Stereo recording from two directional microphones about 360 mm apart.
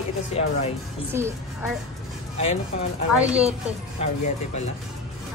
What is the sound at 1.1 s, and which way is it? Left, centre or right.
Speech, centre.